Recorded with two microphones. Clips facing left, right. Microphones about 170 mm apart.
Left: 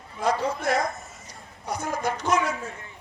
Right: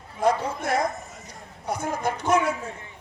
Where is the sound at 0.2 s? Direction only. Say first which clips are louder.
Right 2 dB; 55° right (ahead or behind).